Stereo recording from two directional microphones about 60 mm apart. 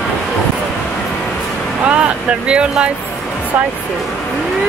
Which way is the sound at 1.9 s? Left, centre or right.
Centre.